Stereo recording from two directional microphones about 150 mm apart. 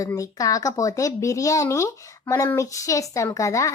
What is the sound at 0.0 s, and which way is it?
Speech, 20° left (ahead or behind).